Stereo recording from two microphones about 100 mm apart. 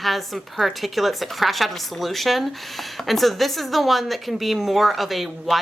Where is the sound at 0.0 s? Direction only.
Centre (ahead or behind).